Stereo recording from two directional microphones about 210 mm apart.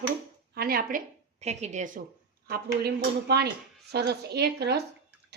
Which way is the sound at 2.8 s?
50° right (ahead or behind).